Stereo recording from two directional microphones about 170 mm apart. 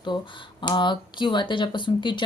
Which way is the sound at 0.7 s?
25° left (ahead or behind).